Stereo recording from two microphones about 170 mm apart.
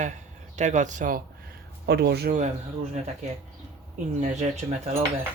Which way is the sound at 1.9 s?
75° right (ahead or behind).